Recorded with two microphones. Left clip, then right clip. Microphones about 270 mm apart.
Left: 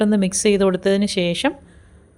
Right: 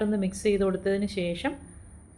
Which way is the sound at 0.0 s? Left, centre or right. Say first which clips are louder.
Left 9 dB; left.